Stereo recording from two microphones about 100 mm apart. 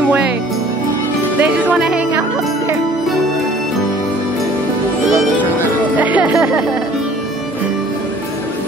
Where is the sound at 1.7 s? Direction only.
5° right (ahead or behind).